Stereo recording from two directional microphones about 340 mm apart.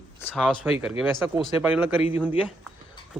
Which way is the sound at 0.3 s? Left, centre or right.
Centre.